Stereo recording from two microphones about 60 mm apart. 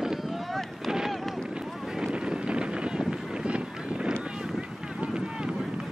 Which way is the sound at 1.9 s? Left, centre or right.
Centre.